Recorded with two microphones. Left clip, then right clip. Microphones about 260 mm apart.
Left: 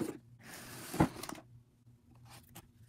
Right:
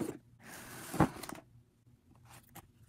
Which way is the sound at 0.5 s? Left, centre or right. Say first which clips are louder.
Right 1 dB; centre.